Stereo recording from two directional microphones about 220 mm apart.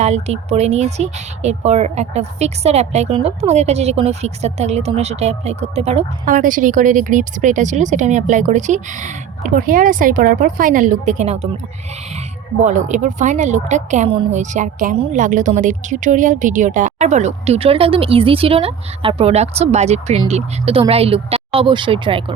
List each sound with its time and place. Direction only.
0.0 s a woman's voice: 30° right (ahead or behind)
12.6 s a woman's voice: 35° right (ahead or behind)